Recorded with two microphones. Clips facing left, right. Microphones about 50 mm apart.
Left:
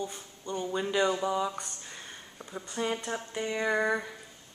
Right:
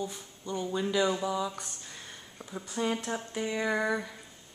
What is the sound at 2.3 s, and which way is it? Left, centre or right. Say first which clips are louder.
Speech: even; centre.